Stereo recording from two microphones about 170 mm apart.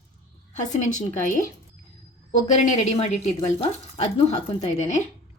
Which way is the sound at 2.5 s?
40° left (ahead or behind).